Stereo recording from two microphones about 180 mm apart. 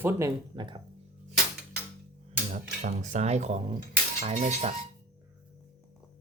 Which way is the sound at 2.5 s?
40° right (ahead or behind).